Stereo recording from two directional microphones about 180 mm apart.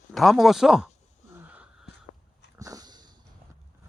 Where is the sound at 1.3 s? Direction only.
10° right (ahead or behind).